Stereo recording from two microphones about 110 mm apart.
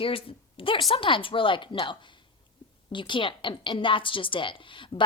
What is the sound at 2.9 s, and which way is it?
A woman's voice, 45° left (ahead or behind).